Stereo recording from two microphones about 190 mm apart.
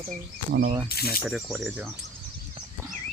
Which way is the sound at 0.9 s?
55° left (ahead or behind).